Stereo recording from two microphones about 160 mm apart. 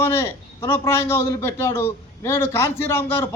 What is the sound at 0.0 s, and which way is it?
A man's voice, 15° left (ahead or behind).